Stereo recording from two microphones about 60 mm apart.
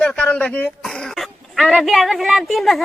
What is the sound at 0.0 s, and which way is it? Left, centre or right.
Speech, centre.